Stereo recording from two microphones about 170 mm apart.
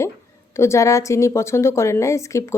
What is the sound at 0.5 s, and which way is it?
A woman's voice, 15° left (ahead or behind).